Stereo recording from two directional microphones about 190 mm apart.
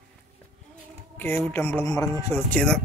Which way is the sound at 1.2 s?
10° left (ahead or behind).